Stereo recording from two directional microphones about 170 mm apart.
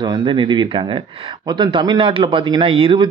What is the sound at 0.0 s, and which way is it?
Speech, 30° right (ahead or behind).